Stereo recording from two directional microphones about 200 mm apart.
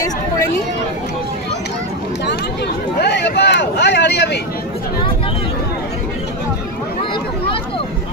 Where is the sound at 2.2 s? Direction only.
55° left (ahead or behind).